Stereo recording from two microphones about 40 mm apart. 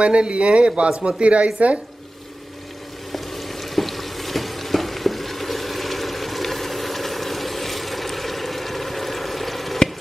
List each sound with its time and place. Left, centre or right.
0.0 s speech: right
3.1 s stir: centre